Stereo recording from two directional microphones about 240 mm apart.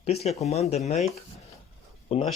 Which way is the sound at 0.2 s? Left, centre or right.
Left.